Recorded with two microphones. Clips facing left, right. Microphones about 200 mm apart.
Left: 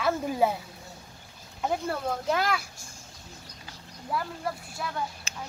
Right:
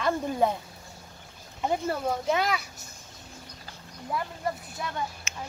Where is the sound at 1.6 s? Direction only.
Centre (ahead or behind).